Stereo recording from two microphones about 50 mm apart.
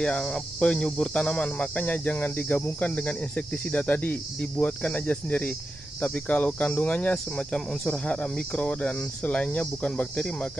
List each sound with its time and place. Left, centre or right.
0.0 s speech: centre